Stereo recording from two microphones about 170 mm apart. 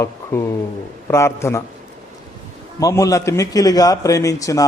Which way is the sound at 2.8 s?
20° left (ahead or behind).